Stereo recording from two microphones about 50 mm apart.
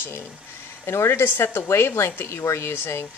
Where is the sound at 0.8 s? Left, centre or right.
Left.